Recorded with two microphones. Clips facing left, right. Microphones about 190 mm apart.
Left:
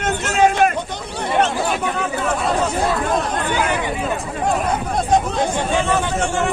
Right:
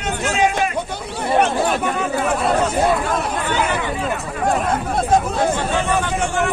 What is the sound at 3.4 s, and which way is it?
Chatter, 15° left (ahead or behind).